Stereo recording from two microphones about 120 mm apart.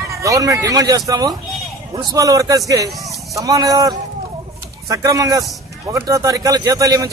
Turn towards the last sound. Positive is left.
turn(degrees=-30)  # may be behind; listen again after turning